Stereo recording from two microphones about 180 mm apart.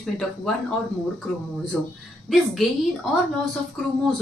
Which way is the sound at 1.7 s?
Centre (ahead or behind).